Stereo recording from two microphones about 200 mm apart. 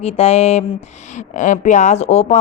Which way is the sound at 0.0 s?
30° left (ahead or behind).